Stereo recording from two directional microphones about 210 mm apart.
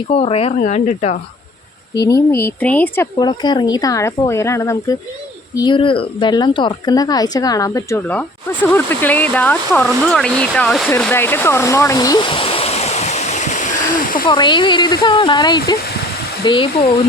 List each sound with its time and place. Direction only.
0.1 s speech: 30° left (ahead or behind)
2.0 s speech: 15° left (ahead or behind)
10.9 s stream: 10° left (ahead or behind); by 14.3 s 40° left (ahead or behind)
14.3 s speech: 20° left (ahead or behind)